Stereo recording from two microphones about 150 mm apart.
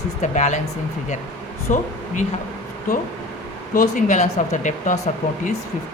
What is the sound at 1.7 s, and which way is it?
Speech, 55° left (ahead or behind).